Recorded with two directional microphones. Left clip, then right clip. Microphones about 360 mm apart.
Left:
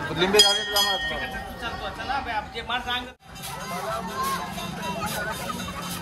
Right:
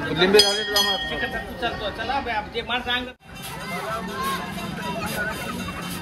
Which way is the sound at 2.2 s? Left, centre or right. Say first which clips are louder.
Right 3 dB; centre.